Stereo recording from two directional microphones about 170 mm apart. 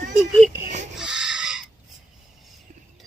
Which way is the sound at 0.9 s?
5° right (ahead or behind).